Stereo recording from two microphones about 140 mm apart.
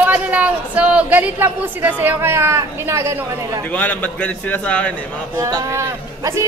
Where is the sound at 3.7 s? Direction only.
10° left (ahead or behind).